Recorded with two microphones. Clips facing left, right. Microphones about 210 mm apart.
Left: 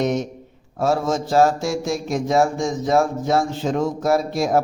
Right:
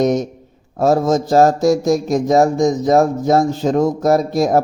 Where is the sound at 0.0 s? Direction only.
40° right (ahead or behind).